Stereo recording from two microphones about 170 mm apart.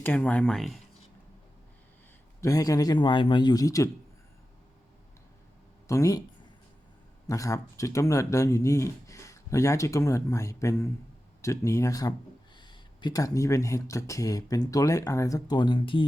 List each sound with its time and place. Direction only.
0.0 s speech: 10° left (ahead or behind)
2.4 s speech: 20° left (ahead or behind)
5.9 s speech: 20° left (ahead or behind)
7.3 s speech: 20° left (ahead or behind)